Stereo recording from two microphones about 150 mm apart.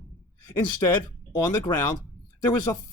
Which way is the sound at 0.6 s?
30° left (ahead or behind).